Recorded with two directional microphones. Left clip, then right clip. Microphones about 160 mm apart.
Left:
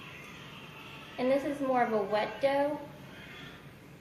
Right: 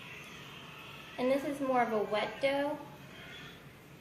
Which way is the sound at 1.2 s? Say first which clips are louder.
Left 2 dB; 25° right (ahead or behind).